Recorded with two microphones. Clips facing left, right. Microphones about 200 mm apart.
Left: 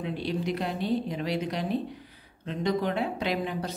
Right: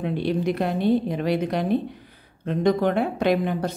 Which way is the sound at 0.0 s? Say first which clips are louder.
Right 6 dB; 55° right (ahead or behind).